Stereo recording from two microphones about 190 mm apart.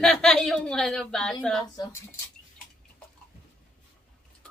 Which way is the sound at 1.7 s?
20° left (ahead or behind).